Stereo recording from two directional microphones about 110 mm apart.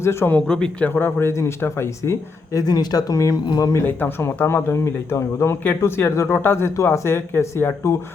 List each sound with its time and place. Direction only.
0.0 s speech: 25° left (ahead or behind)
0.3 s speech: 5° left (ahead or behind); by 3.8 s 30° left (ahead or behind)
3.8 s speech: 20° left (ahead or behind)